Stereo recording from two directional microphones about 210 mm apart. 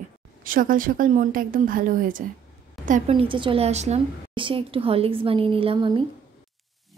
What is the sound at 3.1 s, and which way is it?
A woman's voice, 25° right (ahead or behind).